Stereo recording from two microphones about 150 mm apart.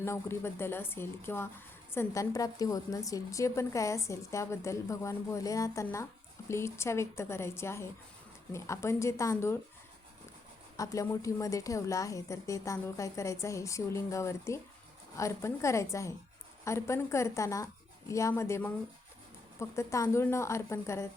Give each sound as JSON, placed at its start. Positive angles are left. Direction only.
{"t": 0.0, "sound": "a woman's voice", "side_deg": 15}
{"t": 10.8, "sound": "a woman's voice", "side_deg": 20}